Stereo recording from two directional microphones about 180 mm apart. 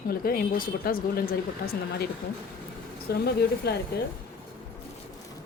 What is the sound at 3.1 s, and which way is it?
Speech, 60° left (ahead or behind).